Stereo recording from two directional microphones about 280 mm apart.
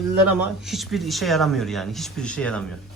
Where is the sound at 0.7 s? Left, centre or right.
Centre.